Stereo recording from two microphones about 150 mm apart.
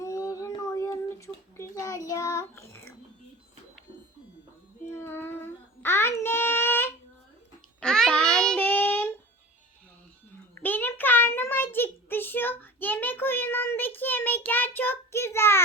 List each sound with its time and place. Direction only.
0.0 s child singing: 20° left (ahead or behind)
4.9 s child singing: 15° left (ahead or behind)
5.8 s a sound: 15° left (ahead or behind)
7.8 s child singing: 5° left (ahead or behind)
10.5 s child singing: 15° left (ahead or behind)